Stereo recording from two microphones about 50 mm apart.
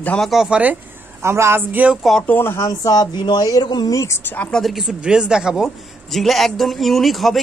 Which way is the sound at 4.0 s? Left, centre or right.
Left.